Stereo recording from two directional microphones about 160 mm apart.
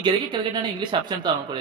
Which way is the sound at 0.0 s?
30° right (ahead or behind).